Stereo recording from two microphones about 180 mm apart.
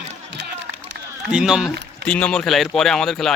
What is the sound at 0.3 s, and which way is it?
Run, 65° right (ahead or behind).